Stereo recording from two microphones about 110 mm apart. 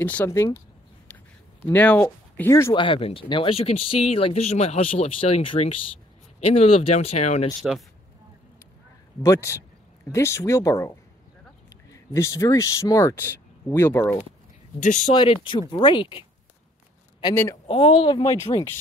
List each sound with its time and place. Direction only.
0.0 s speech: 15° left (ahead or behind)
0.3 s speech: 25° left (ahead or behind)
1.7 s speech: 15° left (ahead or behind)
2.7 s speech: 50° left (ahead or behind); by 5.5 s 70° left (ahead or behind)
6.5 s speech: 70° left (ahead or behind)
7.6 s speech: 5° right (ahead or behind)
9.2 s speech: 30° left (ahead or behind)
14.8 s speech: 90° left
15.1 s speech: 45° left (ahead or behind)
17.3 s speech: 25° left (ahead or behind)
17.6 s speech: 55° left (ahead or behind)